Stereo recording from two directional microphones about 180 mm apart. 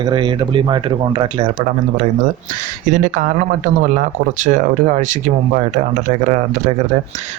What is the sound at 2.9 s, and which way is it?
Speech, 45° right (ahead or behind).